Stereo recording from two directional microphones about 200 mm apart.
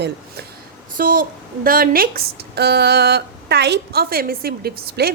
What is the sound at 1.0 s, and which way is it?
Speech, 45° right (ahead or behind).